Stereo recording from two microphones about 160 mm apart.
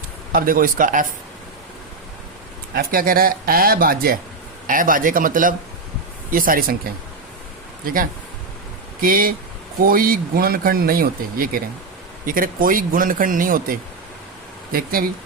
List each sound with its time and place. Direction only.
0.3 s speech: 60° right (ahead or behind)
2.7 s a man's voice: 65° right (ahead or behind)
7.9 s a man's voice: 65° right (ahead or behind)